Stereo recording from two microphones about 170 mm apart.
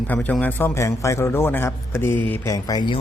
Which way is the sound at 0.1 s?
10° left (ahead or behind).